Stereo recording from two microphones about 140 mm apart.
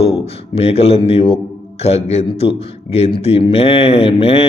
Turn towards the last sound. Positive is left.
turn(degrees=45)  # may be behind; listen again after turning